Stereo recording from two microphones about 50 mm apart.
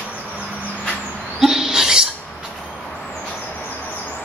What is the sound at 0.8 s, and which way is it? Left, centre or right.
Vehicle, left.